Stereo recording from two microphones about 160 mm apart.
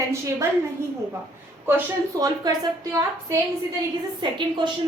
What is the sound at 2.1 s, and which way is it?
Speech, 25° right (ahead or behind).